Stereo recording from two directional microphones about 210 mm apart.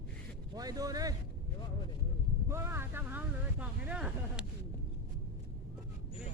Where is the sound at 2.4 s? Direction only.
10° right (ahead or behind).